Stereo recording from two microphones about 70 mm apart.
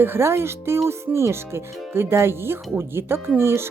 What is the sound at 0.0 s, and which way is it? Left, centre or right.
Speech, right.